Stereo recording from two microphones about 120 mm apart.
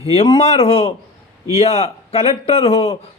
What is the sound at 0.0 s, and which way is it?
A man's voice, 55° left (ahead or behind).